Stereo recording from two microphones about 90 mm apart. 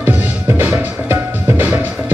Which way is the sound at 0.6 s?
20° right (ahead or behind).